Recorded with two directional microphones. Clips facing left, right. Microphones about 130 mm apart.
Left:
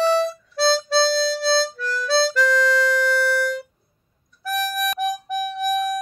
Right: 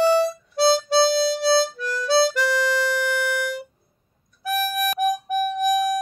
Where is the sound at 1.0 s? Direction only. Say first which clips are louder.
Right 1 dB; 55° right (ahead or behind).